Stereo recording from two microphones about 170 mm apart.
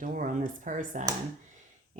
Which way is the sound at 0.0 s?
50° right (ahead or behind).